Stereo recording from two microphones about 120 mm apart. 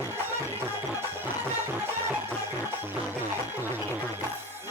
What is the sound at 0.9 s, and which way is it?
Music, 20° right (ahead or behind).